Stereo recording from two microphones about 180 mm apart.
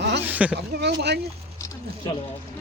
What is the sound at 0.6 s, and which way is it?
Speech, 70° right (ahead or behind).